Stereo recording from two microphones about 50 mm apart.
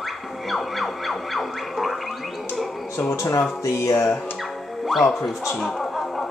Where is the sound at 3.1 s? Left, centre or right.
Left.